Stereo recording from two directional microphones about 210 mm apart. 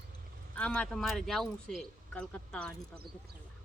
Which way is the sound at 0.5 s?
5° left (ahead or behind).